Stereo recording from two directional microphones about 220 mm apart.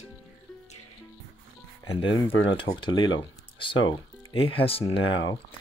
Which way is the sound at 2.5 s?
25° left (ahead or behind).